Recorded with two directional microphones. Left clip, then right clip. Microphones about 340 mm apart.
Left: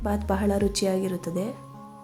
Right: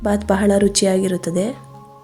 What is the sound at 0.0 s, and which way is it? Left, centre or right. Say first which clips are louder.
A woman's voice: right 9 dB; left.